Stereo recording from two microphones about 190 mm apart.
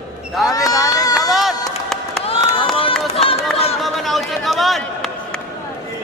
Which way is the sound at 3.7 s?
Centre (ahead or behind).